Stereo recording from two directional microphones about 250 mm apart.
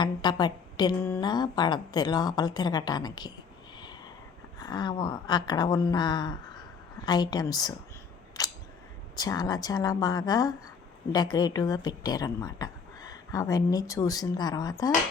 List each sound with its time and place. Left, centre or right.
0.0 s a woman's voice: centre
4.6 s a woman's voice: centre
8.4 s camera: centre
9.1 s a woman's voice: centre